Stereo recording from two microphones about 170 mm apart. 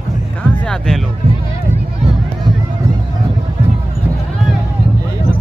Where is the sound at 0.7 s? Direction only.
5° left (ahead or behind).